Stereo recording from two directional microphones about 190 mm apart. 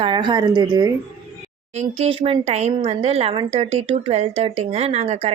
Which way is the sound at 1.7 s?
35° right (ahead or behind).